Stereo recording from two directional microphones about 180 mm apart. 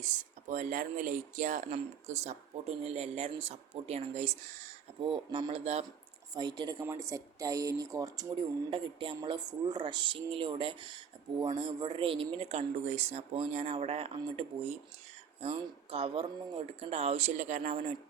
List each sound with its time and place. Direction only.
0.0 s speech: 45° right (ahead or behind)
6.3 s speech: 25° right (ahead or behind)